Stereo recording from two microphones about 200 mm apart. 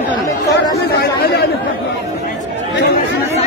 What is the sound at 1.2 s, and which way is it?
Speech, 55° left (ahead or behind).